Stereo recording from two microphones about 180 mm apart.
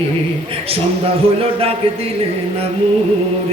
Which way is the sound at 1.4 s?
30° right (ahead or behind).